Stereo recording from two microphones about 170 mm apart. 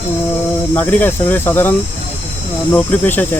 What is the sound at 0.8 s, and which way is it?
Speech, 10° left (ahead or behind).